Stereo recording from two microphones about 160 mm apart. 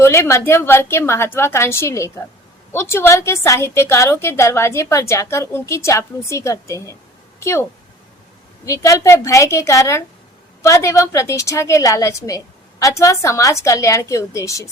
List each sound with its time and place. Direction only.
0.0 s a woman's voice: 15° left (ahead or behind)